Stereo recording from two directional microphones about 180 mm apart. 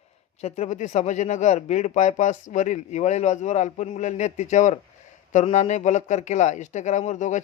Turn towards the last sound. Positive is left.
turn(degrees=40)  # may be behind; listen again after turning